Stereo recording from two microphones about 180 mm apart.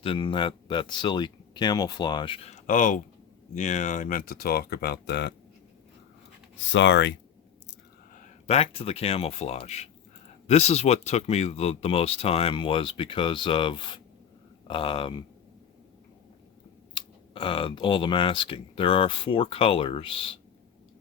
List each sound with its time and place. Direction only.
0.0 s speech: 30° left (ahead or behind); by 5.3 s 70° left (ahead or behind)
6.7 s speech: 90° left
8.4 s speech: 35° left (ahead or behind)
16.9 s speech: 30° left (ahead or behind)